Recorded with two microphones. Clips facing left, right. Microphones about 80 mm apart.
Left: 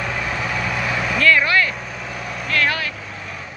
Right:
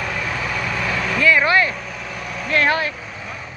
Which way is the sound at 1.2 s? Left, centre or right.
Centre.